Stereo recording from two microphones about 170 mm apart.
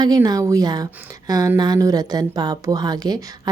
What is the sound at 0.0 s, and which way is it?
A woman's voice, 25° right (ahead or behind).